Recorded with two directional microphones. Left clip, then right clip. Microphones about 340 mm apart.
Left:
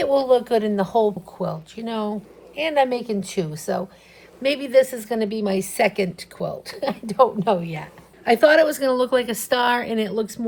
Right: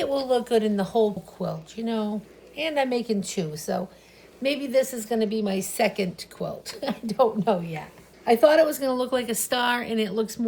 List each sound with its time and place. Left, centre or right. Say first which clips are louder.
0.0 s a woman's voice: left 6 dB; centre